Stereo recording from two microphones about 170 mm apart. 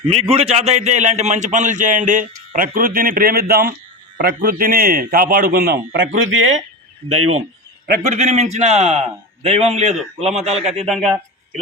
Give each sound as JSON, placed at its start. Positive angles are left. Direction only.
{"t": 0.1, "sound": "a man's voice", "side_deg": -35}
{"t": 7.9, "sound": "a man's voice", "side_deg": -50}
{"t": 10.8, "sound": "speech", "side_deg": 0}